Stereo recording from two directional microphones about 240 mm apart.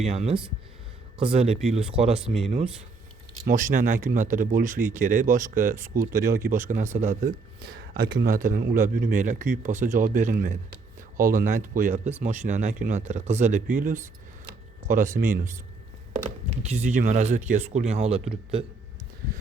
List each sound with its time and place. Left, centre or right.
0.0 s speech: right
2.2 s speech: centre
3.4 s speech: right
16.2 s speech: centre
16.8 s speech: right